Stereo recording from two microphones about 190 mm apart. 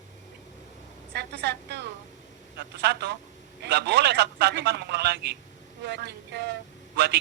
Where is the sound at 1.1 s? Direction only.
60° right (ahead or behind).